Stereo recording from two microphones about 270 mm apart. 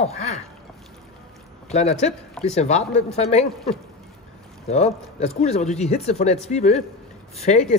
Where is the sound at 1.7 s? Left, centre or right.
Left.